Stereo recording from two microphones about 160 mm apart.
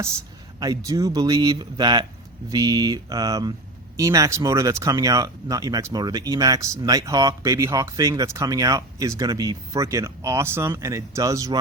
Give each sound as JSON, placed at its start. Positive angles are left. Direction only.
{"t": 0.6, "sound": "speech", "side_deg": -20}